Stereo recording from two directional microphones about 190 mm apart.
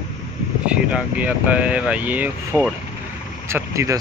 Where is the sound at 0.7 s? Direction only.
5° right (ahead or behind).